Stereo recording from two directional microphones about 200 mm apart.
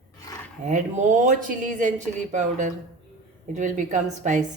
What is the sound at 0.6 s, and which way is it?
Speech, 40° right (ahead or behind).